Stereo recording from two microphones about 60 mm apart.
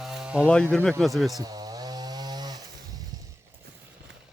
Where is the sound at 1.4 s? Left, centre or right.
Right.